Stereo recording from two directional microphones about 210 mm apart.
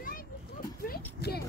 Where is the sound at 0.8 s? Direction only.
45° left (ahead or behind).